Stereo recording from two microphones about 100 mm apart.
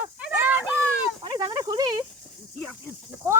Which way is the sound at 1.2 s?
45° right (ahead or behind).